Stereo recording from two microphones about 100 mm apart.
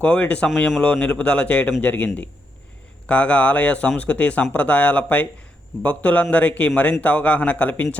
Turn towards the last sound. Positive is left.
turn(degrees=15)  # may be behind; listen again after turning